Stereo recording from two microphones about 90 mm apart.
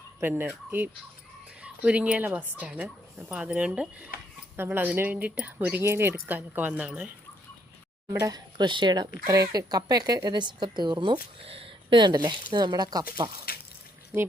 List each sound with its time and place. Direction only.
0.2 s speech: 25° right (ahead or behind)
8.0 s speech: 45° right (ahead or behind)
11.3 s speech: 90° right; by 13.3 s 50° right (ahead or behind)